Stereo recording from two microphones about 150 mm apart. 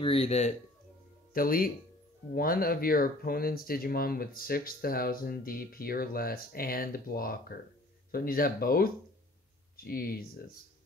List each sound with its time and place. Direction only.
0.0 s speech: 40° left (ahead or behind)
1.3 s speech: 75° left (ahead or behind)